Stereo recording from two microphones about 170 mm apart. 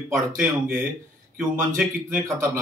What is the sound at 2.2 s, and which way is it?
Speech, 15° right (ahead or behind).